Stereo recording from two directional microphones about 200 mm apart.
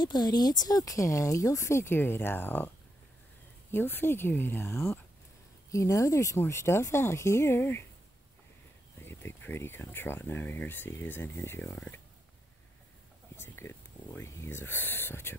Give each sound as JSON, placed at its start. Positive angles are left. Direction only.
{"t": 0.0, "sound": "speech", "side_deg": 20}
{"t": 3.7, "sound": "speech", "side_deg": 10}
{"t": 9.0, "sound": "speech", "side_deg": 10}
{"t": 13.4, "sound": "speech", "side_deg": 10}